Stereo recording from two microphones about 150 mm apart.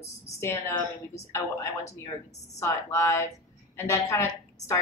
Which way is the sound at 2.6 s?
20° left (ahead or behind).